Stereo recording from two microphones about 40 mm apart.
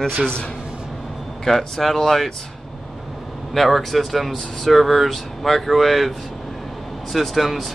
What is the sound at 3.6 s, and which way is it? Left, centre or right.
Speech, centre.